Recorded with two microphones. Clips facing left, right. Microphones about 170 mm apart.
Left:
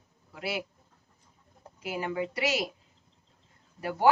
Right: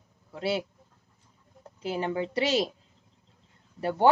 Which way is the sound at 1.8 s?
30° right (ahead or behind).